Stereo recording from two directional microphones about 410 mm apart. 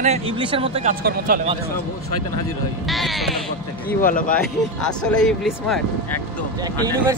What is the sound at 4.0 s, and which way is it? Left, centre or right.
Speech, centre.